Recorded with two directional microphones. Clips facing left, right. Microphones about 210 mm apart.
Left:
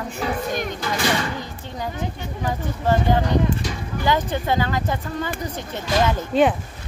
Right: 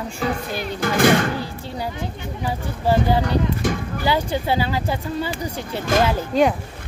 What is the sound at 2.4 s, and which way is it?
Speech, 10° right (ahead or behind).